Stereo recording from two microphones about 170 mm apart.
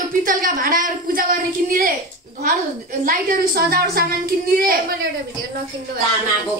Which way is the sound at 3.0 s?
60° right (ahead or behind).